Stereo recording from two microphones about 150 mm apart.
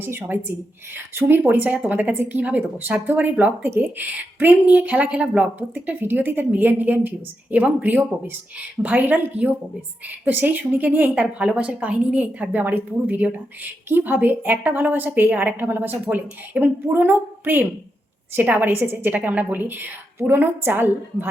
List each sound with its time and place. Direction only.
0.0 s speech: 15° right (ahead or behind)